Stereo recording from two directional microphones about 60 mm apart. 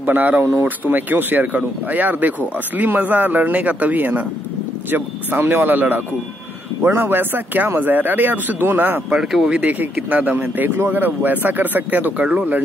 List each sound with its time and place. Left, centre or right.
0.0 s speech: right
5.4 s speech: right
9.2 s speech: centre
9.6 s speech: right